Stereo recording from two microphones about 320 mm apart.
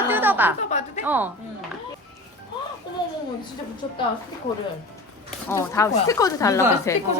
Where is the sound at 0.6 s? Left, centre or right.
Left.